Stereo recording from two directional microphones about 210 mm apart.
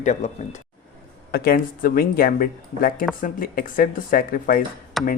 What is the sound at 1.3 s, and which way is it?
Speech, 45° left (ahead or behind).